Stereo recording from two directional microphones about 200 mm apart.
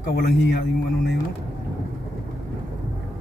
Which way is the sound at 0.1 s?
55° left (ahead or behind).